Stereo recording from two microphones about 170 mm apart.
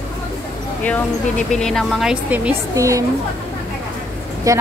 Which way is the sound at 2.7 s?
20° right (ahead or behind).